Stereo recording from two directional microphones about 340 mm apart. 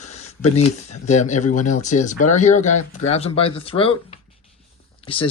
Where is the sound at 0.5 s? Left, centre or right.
Centre.